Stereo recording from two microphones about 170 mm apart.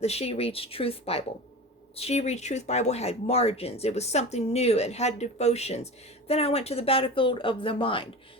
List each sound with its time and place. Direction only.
0.0 s speech: 35° left (ahead or behind)